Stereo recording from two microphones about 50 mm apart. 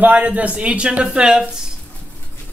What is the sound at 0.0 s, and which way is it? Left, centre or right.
A man's voice, right.